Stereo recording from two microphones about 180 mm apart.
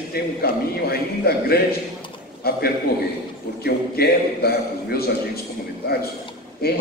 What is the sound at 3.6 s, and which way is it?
A man's voice, 60° left (ahead or behind).